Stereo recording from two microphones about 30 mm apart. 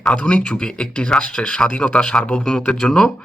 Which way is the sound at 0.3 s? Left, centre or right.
Left.